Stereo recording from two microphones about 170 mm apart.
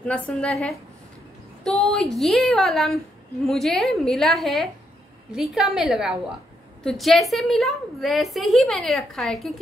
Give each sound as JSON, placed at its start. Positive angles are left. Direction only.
{"t": 0.0, "sound": "a woman's voice", "side_deg": 5}